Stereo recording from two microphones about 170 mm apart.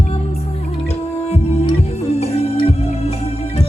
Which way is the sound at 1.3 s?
35° left (ahead or behind).